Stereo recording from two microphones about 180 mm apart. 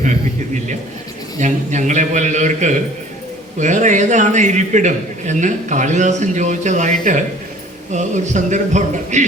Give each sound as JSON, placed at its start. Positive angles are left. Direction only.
{"t": 1.4, "sound": "a man's voice", "side_deg": -40}
{"t": 7.9, "sound": "a man's voice", "side_deg": -40}